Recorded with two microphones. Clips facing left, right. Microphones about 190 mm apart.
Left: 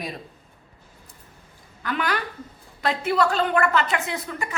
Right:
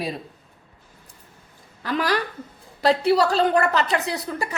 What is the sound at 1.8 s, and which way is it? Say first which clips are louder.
A woman's voice: right 3 dB; 35° right (ahead or behind).